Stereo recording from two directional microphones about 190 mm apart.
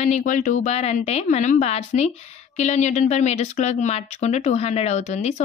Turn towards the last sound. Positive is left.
turn(degrees=35)  # may be behind; listen again after turning